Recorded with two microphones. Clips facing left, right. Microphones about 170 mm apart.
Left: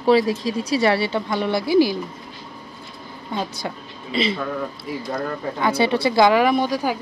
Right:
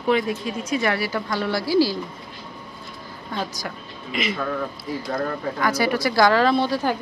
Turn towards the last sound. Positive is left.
turn(degrees=15)  # may be behind; listen again after turning